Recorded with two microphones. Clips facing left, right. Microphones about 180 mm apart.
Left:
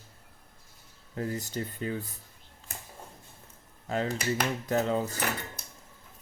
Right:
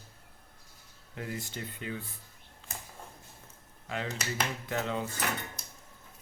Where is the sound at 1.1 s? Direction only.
35° left (ahead or behind).